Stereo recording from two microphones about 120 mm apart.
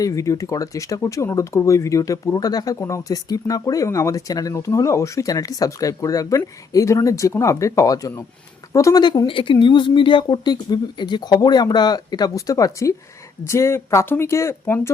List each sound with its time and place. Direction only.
0.0 s speech: 25° left (ahead or behind)